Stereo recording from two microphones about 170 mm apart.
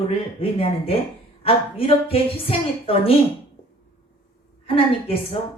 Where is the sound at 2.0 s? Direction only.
35° left (ahead or behind).